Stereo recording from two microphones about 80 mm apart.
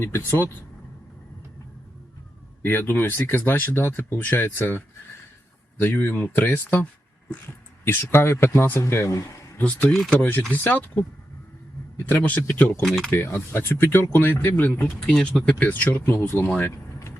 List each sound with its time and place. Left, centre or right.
0.0 s speech: left
2.6 s speech: left
5.8 s speech: left
9.6 s speech: left
9.9 s speech: centre
10.2 s speech: left
12.0 s speech: left
12.8 s speech: centre
13.1 s speech: left
15.0 s speech: centre; by 16.5 s left
16.6 s a sound: left